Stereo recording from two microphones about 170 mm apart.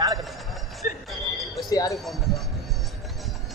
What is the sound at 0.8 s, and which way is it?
Music, 45° left (ahead or behind).